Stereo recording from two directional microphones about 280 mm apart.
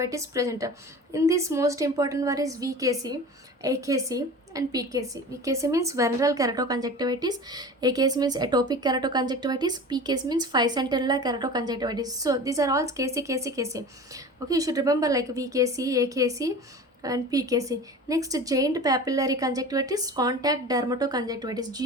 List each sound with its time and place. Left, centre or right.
0.0 s a woman's voice: centre